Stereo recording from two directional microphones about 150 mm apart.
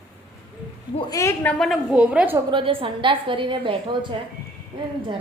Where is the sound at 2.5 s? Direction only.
35° right (ahead or behind).